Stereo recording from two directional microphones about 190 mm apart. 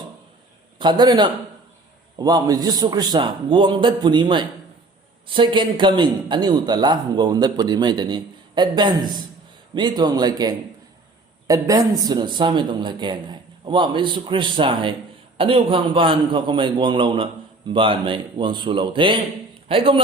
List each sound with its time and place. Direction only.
0.8 s a man's voice: 25° right (ahead or behind)